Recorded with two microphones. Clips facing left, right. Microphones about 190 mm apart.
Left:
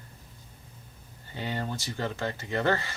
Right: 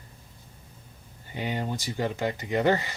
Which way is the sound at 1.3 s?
15° right (ahead or behind).